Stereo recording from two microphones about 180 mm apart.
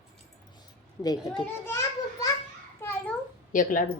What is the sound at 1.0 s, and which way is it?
Speech, 20° left (ahead or behind).